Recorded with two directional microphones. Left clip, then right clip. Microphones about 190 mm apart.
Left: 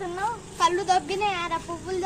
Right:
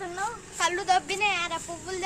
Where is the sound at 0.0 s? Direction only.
15° right (ahead or behind).